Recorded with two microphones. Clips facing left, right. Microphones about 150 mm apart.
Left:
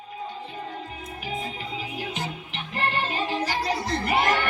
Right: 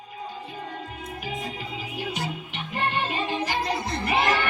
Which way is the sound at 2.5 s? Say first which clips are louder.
Even; centre (ahead or behind).